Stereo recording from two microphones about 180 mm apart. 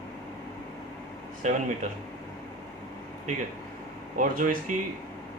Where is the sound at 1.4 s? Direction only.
45° right (ahead or behind).